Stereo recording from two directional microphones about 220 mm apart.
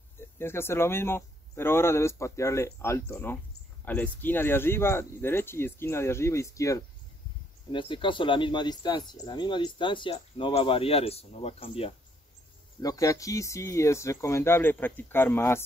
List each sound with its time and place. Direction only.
0.2 s speech: 10° left (ahead or behind); by 11.9 s 25° left (ahead or behind)
12.8 s speech: 15° left (ahead or behind)